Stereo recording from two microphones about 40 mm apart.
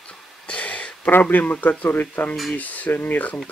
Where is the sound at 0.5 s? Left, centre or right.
Left.